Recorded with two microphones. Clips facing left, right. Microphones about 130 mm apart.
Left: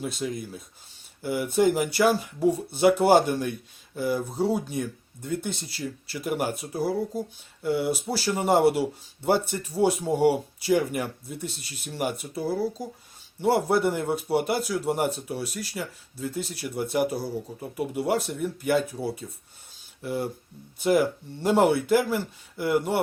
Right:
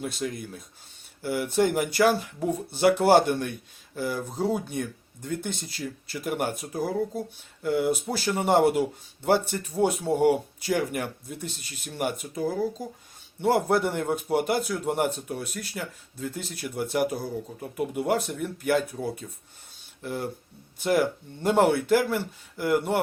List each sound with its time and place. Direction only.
0.0 s speech: centre (ahead or behind)